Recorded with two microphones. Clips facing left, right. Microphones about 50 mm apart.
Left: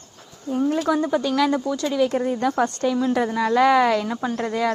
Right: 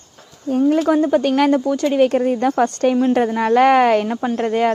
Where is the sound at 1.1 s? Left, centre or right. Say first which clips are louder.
Right 5 dB; right.